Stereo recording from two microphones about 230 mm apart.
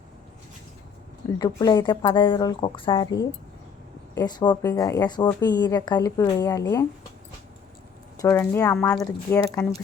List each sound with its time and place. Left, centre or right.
1.4 s a woman's voice: centre
4.2 s a woman's voice: centre
8.2 s a woman's voice: centre